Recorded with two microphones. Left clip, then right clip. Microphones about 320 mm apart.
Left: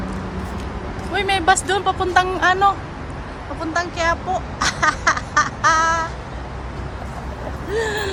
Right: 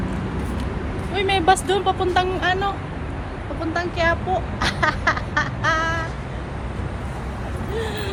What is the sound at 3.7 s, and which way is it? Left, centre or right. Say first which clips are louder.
Speech: left 1 dB; centre.